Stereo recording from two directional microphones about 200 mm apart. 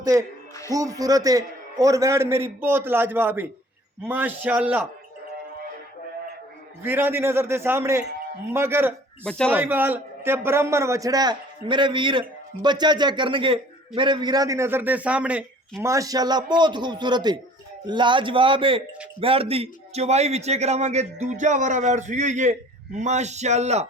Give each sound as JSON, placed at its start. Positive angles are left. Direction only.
{"t": 0.0, "sound": "a man's voice", "side_deg": -15}
{"t": 6.8, "sound": "a man's voice", "side_deg": -10}